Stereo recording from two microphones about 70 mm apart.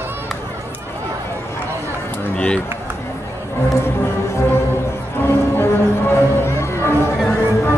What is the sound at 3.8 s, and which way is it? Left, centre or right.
Music, left.